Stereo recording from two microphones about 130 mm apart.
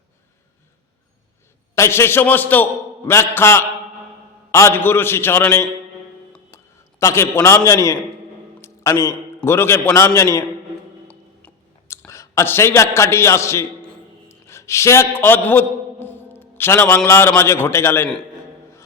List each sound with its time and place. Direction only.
1.7 s a man's voice: 20° left (ahead or behind)
7.0 s a man's voice: 20° left (ahead or behind)
11.1 s music: 10° left (ahead or behind)
12.0 s a man's voice: 25° left (ahead or behind)
14.3 s a sound: 20° left (ahead or behind)
17.1 s a man's voice: 20° left (ahead or behind)